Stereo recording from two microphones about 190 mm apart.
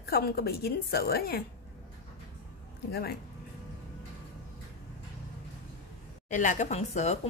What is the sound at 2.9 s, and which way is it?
Speech, 55° left (ahead or behind).